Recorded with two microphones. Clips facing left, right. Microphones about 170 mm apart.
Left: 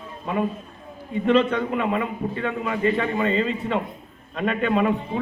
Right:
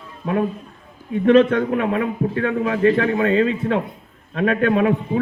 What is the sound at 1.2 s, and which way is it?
A man's voice, 55° right (ahead or behind).